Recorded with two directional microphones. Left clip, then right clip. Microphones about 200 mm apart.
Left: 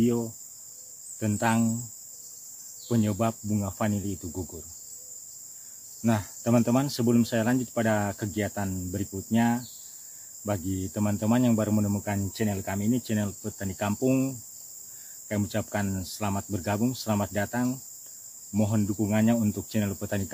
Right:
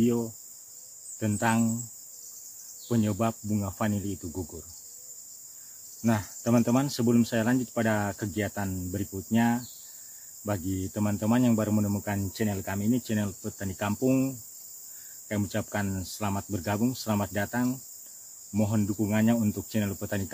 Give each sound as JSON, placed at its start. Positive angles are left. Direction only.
{"t": 0.0, "sound": "speech", "side_deg": 0}
{"t": 2.9, "sound": "speech", "side_deg": 0}
{"t": 6.0, "sound": "speech", "side_deg": 0}